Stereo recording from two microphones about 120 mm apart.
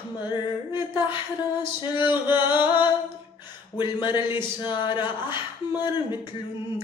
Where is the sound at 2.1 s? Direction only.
20° right (ahead or behind).